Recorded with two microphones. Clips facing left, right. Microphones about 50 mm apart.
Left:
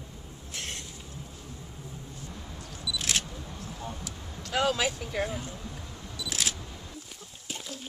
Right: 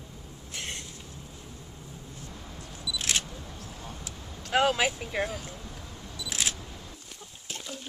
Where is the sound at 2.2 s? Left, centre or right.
Centre.